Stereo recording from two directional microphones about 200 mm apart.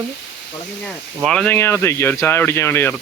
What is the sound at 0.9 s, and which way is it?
Speech, 5° left (ahead or behind).